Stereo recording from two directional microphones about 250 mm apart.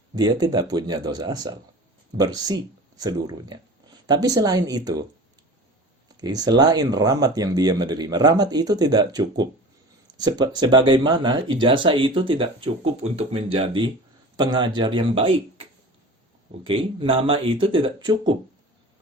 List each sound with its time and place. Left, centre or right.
0.2 s speech: centre
6.1 s speech: centre
16.6 s speech: right